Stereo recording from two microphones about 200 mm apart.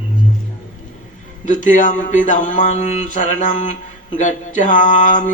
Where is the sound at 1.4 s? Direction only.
40° left (ahead or behind).